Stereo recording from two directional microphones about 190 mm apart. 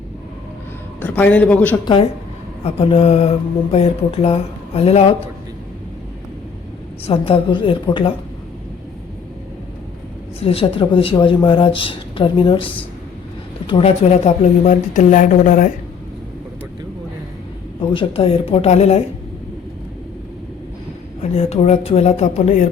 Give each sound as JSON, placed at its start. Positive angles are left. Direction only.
{"t": 1.0, "sound": "a man's voice", "side_deg": 10}
{"t": 1.8, "sound": "speech", "side_deg": 25}
{"t": 7.0, "sound": "speech", "side_deg": 30}
{"t": 10.4, "sound": "speech", "side_deg": 30}
{"t": 17.9, "sound": "speech", "side_deg": 30}
{"t": 21.2, "sound": "speech", "side_deg": 35}